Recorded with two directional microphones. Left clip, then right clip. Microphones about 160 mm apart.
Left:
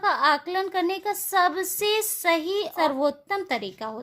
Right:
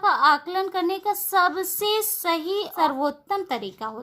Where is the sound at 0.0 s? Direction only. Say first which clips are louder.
Right 3 dB; 15° left (ahead or behind).